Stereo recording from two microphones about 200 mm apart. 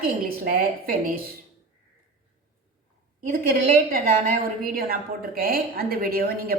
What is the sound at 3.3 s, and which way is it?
Speech, 45° right (ahead or behind).